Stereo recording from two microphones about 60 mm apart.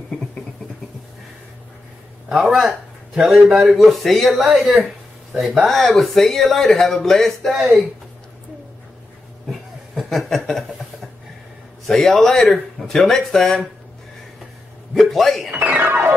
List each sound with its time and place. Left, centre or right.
2.2 s speech: centre
9.5 s a sound: centre
11.9 s speech: centre
15.0 s speech: centre
15.8 s music: right